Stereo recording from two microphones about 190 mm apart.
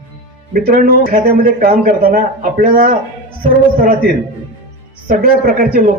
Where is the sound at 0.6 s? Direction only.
50° right (ahead or behind).